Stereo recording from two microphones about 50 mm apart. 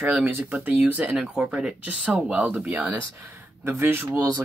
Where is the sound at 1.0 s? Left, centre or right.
Centre.